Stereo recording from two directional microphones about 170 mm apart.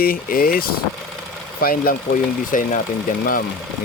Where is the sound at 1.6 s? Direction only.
60° left (ahead or behind).